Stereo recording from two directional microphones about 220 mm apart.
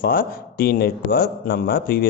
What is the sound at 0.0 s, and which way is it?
A man's voice, 40° left (ahead or behind).